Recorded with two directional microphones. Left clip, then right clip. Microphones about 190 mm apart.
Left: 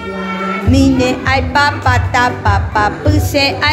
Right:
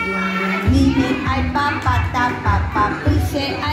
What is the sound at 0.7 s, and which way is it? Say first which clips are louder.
Music: left 7 dB; 50° left (ahead or behind).